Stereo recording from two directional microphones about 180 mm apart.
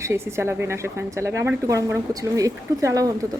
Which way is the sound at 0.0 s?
15° right (ahead or behind).